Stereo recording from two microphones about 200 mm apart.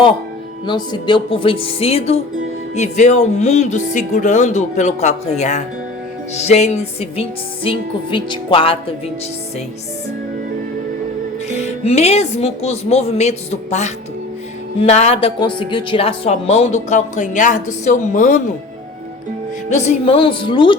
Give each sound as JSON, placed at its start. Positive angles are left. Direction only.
{"t": 0.7, "sound": "music", "side_deg": 25}
{"t": 2.7, "sound": "a woman's voice", "side_deg": 35}
{"t": 6.3, "sound": "music", "side_deg": 30}
{"t": 11.4, "sound": "a woman's voice", "side_deg": 35}
{"t": 19.7, "sound": "music", "side_deg": 35}